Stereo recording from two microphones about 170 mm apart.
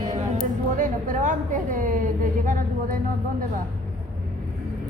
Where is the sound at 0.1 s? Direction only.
50° right (ahead or behind).